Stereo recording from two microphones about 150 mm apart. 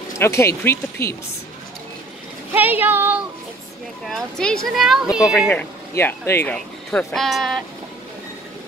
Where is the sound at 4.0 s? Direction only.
5° left (ahead or behind).